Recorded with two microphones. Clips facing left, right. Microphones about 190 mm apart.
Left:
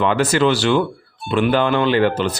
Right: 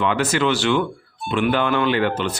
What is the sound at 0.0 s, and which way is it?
Speech, 35° left (ahead or behind).